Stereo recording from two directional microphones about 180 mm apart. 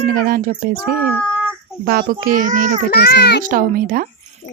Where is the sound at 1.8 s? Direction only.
55° right (ahead or behind).